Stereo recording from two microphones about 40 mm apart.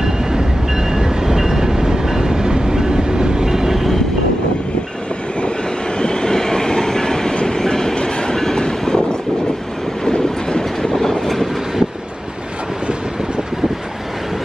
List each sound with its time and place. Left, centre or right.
0.0 s train: centre
5.9 s train: centre
10.0 s vehicle: centre